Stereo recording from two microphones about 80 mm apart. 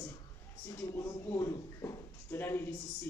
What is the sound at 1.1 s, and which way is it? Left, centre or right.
Speech, left.